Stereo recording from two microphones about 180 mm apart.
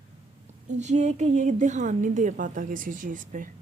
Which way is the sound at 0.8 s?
40° right (ahead or behind).